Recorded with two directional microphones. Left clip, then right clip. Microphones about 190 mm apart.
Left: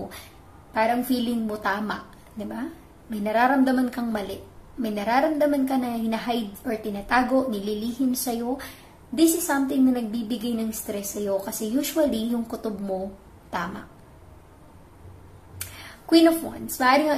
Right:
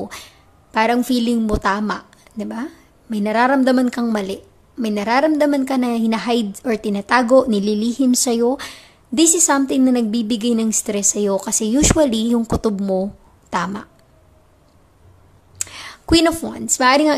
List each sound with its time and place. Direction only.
0.7 s a woman's voice: 45° right (ahead or behind)
15.6 s speech: 45° right (ahead or behind)